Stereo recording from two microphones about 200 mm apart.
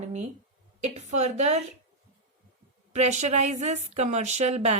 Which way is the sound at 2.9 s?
35° right (ahead or behind).